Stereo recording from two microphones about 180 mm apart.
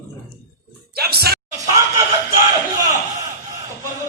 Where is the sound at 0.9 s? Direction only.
60° right (ahead or behind).